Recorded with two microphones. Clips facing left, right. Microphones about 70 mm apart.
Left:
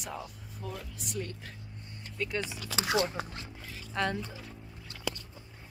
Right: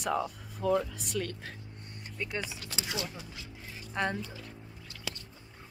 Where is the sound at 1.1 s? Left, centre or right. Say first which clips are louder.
Right 3 dB; right.